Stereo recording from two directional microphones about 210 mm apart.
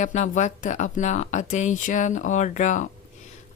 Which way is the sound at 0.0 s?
35° left (ahead or behind).